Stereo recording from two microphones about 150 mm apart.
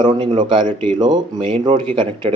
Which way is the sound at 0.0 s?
30° right (ahead or behind).